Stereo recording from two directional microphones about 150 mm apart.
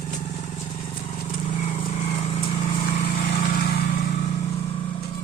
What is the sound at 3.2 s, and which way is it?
Vehicle, 80° left.